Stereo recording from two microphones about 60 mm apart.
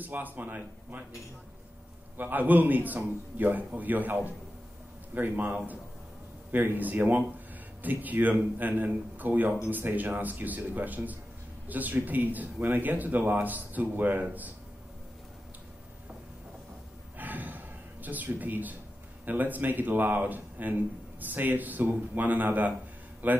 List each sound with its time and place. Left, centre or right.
0.0 s speech: right
2.1 s a man's voice: right
17.2 s a sound: right
19.2 s a man's voice: right